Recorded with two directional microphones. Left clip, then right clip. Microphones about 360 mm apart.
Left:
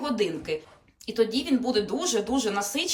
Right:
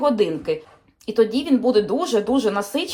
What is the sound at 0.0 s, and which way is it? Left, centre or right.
Speech, centre.